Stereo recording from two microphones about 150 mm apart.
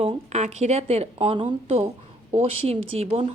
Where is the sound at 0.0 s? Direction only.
45° right (ahead or behind).